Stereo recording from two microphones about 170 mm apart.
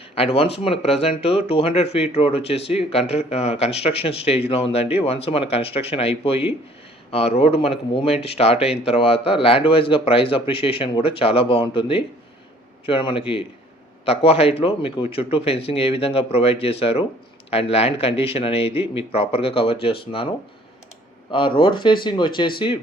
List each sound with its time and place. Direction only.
0.2 s speech: 35° left (ahead or behind)